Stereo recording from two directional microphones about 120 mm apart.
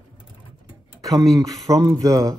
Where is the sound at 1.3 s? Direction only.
30° right (ahead or behind).